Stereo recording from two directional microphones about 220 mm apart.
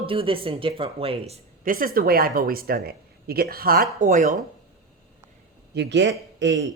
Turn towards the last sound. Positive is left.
turn(degrees=-55)  # may be behind; listen again after turning